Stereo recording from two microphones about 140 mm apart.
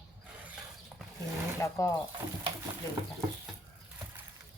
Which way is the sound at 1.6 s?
20° left (ahead or behind).